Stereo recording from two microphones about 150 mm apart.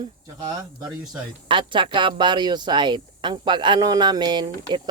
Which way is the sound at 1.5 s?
35° right (ahead or behind).